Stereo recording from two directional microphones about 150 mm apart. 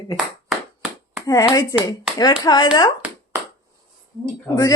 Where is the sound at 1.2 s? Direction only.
25° left (ahead or behind).